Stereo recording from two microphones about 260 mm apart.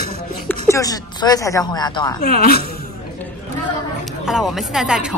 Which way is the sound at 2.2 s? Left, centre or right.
Left.